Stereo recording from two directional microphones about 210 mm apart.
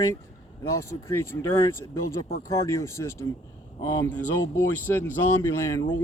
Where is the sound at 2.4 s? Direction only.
15° left (ahead or behind).